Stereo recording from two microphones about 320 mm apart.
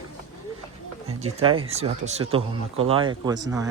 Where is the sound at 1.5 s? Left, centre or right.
Centre.